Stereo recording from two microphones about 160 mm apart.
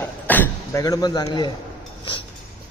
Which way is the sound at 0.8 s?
25° left (ahead or behind).